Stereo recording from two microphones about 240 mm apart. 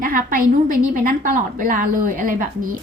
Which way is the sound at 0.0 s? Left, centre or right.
Right.